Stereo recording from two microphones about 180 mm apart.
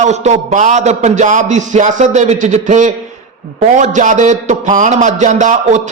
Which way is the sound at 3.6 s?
40° right (ahead or behind).